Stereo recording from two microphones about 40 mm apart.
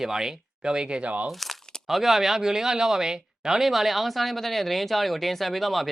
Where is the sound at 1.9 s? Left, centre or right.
Centre.